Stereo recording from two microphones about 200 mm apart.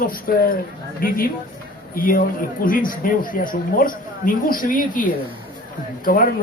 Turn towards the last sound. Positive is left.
turn(degrees=45)  # may be behind; listen again after turning